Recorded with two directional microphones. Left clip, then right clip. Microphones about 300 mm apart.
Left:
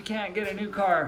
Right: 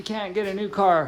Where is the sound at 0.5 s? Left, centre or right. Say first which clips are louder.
Right 5 dB; centre.